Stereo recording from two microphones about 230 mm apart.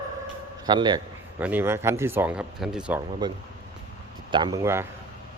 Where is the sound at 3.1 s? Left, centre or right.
Centre.